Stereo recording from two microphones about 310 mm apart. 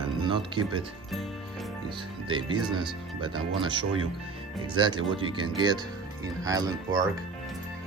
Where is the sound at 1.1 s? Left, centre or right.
Centre.